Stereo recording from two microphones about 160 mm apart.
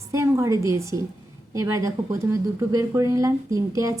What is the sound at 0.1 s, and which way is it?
A woman's voice, 15° right (ahead or behind).